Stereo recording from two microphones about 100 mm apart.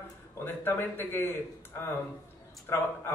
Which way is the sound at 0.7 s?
20° left (ahead or behind).